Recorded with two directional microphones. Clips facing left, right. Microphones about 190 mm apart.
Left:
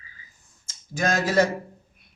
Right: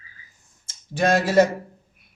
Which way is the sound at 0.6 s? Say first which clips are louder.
Right 5 dB; 30° right (ahead or behind).